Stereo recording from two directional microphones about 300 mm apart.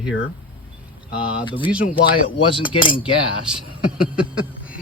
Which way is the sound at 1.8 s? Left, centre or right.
Left.